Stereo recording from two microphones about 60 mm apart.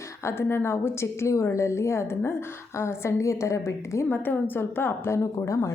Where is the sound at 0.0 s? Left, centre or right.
Left.